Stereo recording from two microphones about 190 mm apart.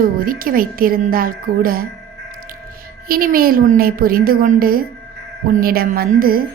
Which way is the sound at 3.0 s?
50° right (ahead or behind).